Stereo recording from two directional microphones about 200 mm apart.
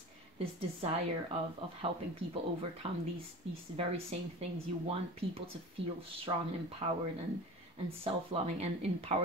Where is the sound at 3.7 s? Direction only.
30° right (ahead or behind).